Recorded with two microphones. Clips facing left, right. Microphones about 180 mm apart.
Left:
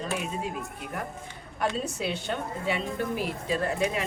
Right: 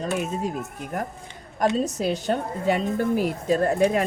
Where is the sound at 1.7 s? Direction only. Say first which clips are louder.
Right 7 dB; 40° right (ahead or behind).